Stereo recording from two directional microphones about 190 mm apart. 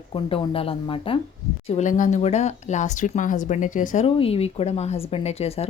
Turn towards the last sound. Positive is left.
turn(degrees=30)  # may be behind; listen again after turning